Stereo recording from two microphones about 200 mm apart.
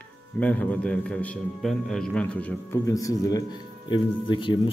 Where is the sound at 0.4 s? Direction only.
5° left (ahead or behind).